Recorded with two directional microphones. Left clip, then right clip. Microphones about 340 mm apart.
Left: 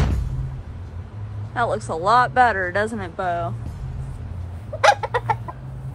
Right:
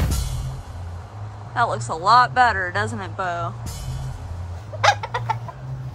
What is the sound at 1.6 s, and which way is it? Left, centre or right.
Speech, centre.